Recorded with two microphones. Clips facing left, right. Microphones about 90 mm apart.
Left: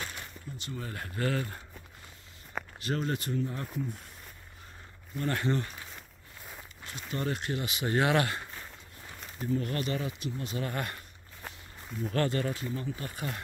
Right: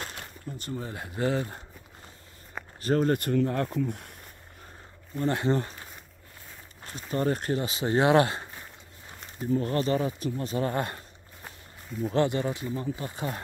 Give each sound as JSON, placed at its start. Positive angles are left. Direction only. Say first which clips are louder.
{"t": 0.0, "sound": "a sound", "louder": "right 2 dB", "side_deg": -45}
{"t": 0.7, "sound": "speech", "louder": "right 3 dB", "side_deg": -20}
{"t": 2.8, "sound": "speech", "louder": "right 9 dB", "side_deg": -40}
{"t": 5.1, "sound": "speech", "louder": "right 4 dB", "side_deg": -30}
{"t": 6.8, "sound": "speech", "louder": "right 6 dB", "side_deg": -35}
{"t": 11.4, "sound": "walk", "louder": "left 1 dB", "side_deg": -10}
{"t": 12.1, "sound": "speech", "louder": "right 4 dB", "side_deg": -20}